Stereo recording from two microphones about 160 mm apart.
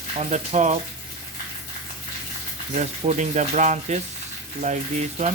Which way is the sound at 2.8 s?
45° right (ahead or behind).